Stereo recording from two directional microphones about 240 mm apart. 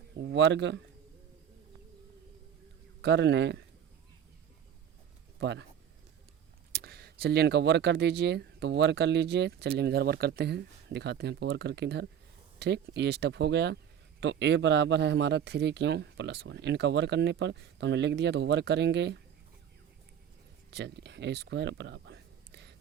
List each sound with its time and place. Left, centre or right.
0.2 s speech: right
3.0 s speech: right
5.4 s speech: right
6.8 s speech: right
20.7 s speech: right